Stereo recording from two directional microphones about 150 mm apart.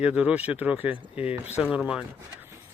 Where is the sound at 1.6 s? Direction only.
5° right (ahead or behind).